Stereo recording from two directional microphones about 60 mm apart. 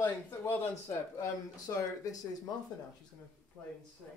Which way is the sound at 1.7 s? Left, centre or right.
Left.